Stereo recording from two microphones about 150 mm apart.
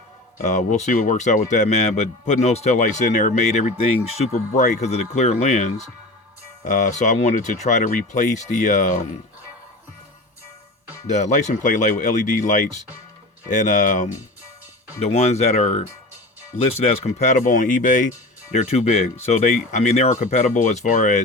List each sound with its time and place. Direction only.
0.4 s speech: 55° left (ahead or behind)
11.0 s speech: 50° left (ahead or behind)